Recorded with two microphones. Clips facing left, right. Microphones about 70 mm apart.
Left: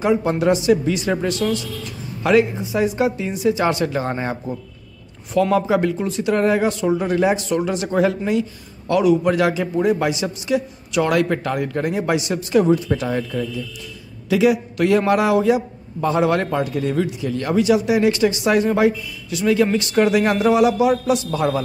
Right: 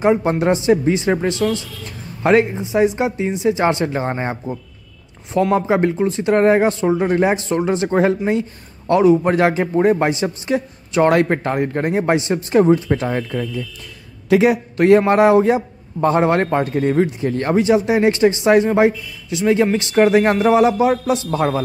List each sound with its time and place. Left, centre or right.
0.0 s a man's voice: right